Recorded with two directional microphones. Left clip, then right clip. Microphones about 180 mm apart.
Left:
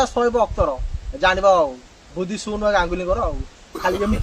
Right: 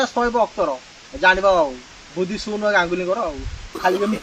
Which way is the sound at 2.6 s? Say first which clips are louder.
Right 1 dB; 35° left (ahead or behind).